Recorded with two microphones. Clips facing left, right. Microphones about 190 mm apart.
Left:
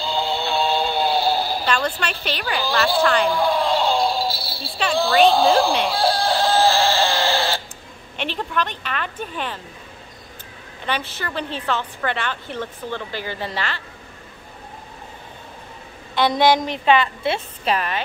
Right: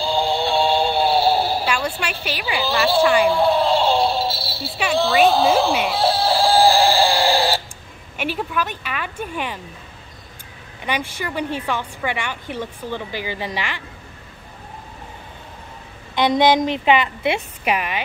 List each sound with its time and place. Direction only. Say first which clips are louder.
0.0 s synthetic singing: right 4 dB; 10° right (ahead or behind)
0.4 s music: right 3 dB; 30° right (ahead or behind)
0.9 s synthetic singing: right 3 dB; 10° right (ahead or behind)
1.6 s a woman's voice: even; 10° right (ahead or behind)
3.3 s a sound: right 3 dB; 25° right (ahead or behind)
3.8 s synthetic singing: right 2 dB; 5° right (ahead or behind)
4.6 s chicken: right 1 dB; 5° right (ahead or behind)
8.2 s a woman's voice: right 1 dB; 10° right (ahead or behind)
10.9 s a woman's voice: right 1 dB; 10° right (ahead or behind)
16.2 s a woman's voice: right 1 dB; 20° right (ahead or behind)